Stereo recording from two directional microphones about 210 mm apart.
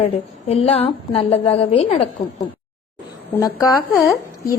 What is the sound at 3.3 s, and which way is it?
Speech, 15° left (ahead or behind).